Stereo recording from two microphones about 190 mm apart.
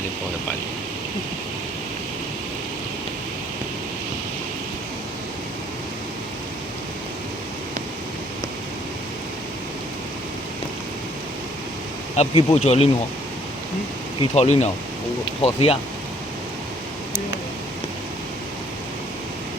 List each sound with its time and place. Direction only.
12.1 s speech: 35° left (ahead or behind)
14.2 s speech: 35° left (ahead or behind)